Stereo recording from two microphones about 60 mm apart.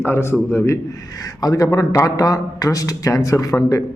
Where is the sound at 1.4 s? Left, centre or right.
Left.